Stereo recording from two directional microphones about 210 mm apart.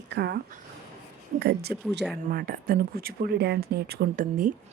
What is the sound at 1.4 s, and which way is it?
A woman's voice, 50° right (ahead or behind).